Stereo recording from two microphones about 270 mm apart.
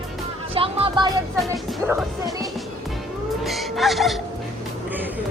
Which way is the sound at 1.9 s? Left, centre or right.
Centre.